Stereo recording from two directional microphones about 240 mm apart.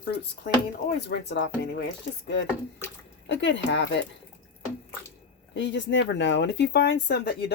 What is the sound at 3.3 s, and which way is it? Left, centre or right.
Speech, left.